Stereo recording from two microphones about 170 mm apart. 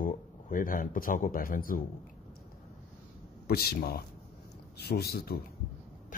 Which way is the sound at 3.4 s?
65° left (ahead or behind).